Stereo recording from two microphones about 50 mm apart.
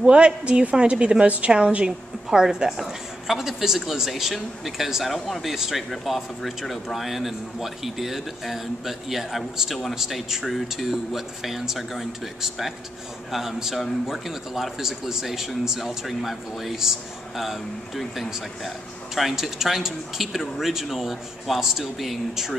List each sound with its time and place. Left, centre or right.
0.0 s a woman's voice: right
1.9 s a woman's voice: centre